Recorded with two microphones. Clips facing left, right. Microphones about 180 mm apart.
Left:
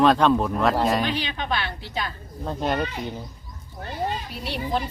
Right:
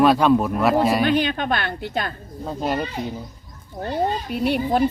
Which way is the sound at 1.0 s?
50° right (ahead or behind).